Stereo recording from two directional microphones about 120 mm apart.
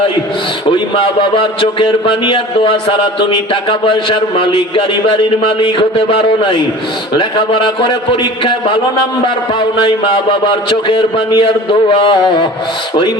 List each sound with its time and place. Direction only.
0.7 s a man's voice: 40° left (ahead or behind)
9.8 s a man's voice: 45° left (ahead or behind)